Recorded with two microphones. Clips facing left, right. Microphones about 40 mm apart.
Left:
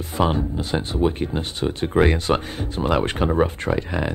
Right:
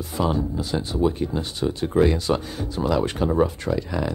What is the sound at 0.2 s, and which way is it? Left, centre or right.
Speech, left.